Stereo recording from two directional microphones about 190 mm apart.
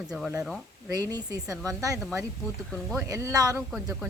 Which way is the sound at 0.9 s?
20° right (ahead or behind).